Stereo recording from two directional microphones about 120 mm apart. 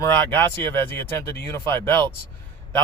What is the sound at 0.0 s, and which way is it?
Speech, 20° left (ahead or behind).